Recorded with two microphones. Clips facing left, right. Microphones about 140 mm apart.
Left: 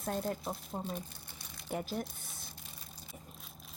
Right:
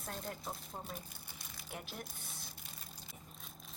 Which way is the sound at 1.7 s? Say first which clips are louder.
Left 10 dB; 40° left (ahead or behind).